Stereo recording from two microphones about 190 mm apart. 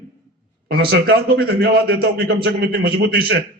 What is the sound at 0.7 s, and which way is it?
A man's voice, 55° right (ahead or behind).